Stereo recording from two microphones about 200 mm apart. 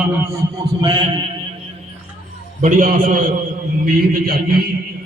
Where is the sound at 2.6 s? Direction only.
40° right (ahead or behind).